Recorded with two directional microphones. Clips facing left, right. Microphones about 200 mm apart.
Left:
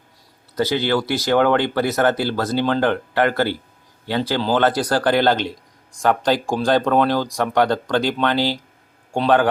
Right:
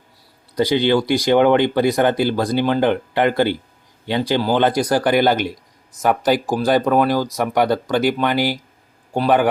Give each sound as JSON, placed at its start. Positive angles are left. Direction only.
{"t": 0.5, "sound": "speech", "side_deg": -15}